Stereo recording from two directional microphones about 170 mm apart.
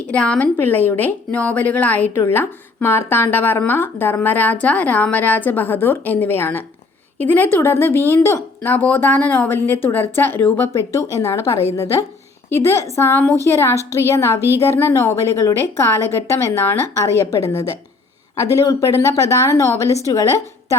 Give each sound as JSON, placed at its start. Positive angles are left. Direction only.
{"t": 0.1, "sound": "a woman's voice", "side_deg": 5}